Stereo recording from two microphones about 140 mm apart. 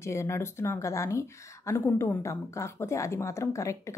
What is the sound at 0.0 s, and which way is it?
Speech, 20° left (ahead or behind).